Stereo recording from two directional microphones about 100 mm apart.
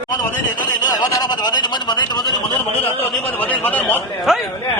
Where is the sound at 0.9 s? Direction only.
40° left (ahead or behind).